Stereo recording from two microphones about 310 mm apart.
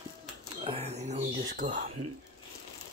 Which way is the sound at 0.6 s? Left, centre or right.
Centre.